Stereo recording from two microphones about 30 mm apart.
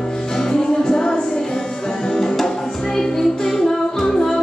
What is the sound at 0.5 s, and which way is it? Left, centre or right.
Music, left.